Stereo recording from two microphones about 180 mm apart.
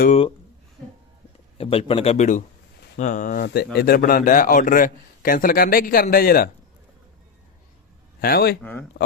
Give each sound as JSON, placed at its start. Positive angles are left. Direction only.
{"t": 1.5, "sound": "a man's voice", "side_deg": 30}
{"t": 3.4, "sound": "a man's voice", "side_deg": 60}
{"t": 8.2, "sound": "speech", "side_deg": 60}
{"t": 8.9, "sound": "speech", "side_deg": 50}